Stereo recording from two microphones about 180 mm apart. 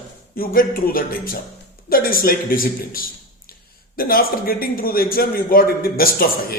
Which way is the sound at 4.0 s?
55° left (ahead or behind).